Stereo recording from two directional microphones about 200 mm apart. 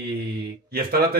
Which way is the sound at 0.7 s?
50° right (ahead or behind).